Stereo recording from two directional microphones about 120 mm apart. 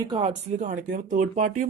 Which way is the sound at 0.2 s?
85° right.